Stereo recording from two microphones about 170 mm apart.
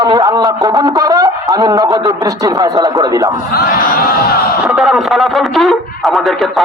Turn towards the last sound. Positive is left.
turn(degrees=0)  # may be behind; listen again after turning